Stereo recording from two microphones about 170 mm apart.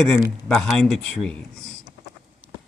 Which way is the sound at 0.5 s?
5° left (ahead or behind).